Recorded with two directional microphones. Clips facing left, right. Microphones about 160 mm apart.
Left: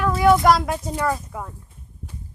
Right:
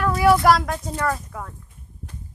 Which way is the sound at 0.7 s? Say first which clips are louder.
Left 1 dB; 10° left (ahead or behind).